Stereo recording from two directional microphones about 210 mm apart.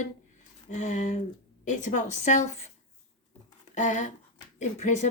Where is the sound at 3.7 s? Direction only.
35° left (ahead or behind).